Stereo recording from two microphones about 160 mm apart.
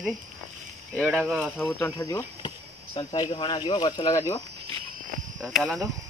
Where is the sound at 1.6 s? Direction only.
20° left (ahead or behind).